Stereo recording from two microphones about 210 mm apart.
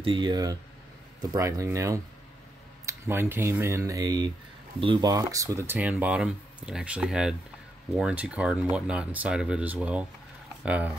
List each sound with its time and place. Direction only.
0.0 s speech: 20° right (ahead or behind); by 10.9 s 5° right (ahead or behind)